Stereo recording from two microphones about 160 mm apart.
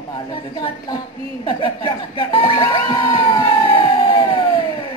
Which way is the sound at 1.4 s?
30° left (ahead or behind).